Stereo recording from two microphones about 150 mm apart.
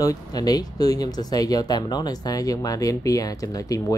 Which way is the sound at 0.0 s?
25° left (ahead or behind).